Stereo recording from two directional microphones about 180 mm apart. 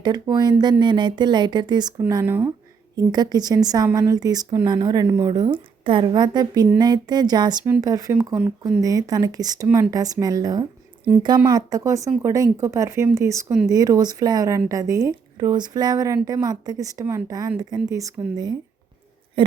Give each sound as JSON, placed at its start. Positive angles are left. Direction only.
{"t": 0.0, "sound": "speech", "side_deg": -25}
{"t": 9.6, "sound": "speech", "side_deg": -10}
{"t": 9.9, "sound": "speech", "side_deg": -20}